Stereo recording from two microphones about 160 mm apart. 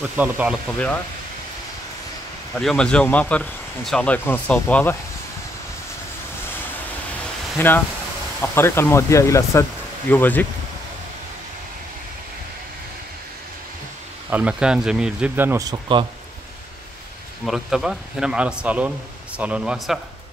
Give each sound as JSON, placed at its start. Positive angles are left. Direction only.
{"t": 0.2, "sound": "speech", "side_deg": -10}
{"t": 2.6, "sound": "speech", "side_deg": 5}
{"t": 7.5, "sound": "speech", "side_deg": 10}
{"t": 14.3, "sound": "speech", "side_deg": -5}
{"t": 15.7, "sound": "speech", "side_deg": -30}
{"t": 17.5, "sound": "speech", "side_deg": -5}